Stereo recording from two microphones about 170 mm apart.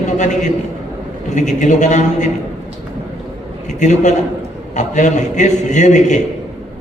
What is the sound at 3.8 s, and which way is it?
A man's voice, 45° left (ahead or behind).